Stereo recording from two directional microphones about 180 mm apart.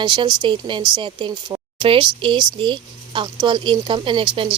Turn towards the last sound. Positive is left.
turn(degrees=-30)  # may be behind; listen again after turning